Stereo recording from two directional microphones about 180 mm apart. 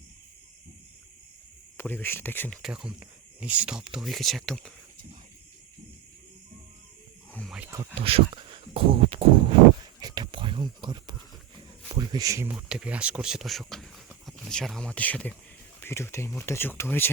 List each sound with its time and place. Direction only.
1.7 s speech: 10° left (ahead or behind)
2.6 s speech: 5° right (ahead or behind)
7.3 s wild animals: centre (ahead or behind)
7.6 s speech: 15° right (ahead or behind)
7.9 s speech: 30° right (ahead or behind)
10.0 s a sound: 25° right (ahead or behind)
11.9 s speech: 20° right (ahead or behind); by 17.1 s 10° left (ahead or behind)